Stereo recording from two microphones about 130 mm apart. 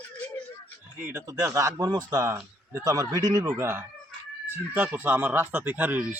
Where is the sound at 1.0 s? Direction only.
20° right (ahead or behind).